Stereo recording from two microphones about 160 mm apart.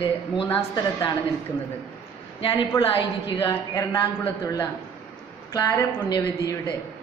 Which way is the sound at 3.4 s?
20° left (ahead or behind).